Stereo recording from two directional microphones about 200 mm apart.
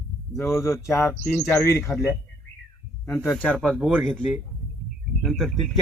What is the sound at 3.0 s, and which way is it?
Speech, 5° left (ahead or behind).